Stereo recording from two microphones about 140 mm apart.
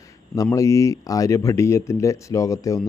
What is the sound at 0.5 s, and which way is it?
Speech, 20° left (ahead or behind).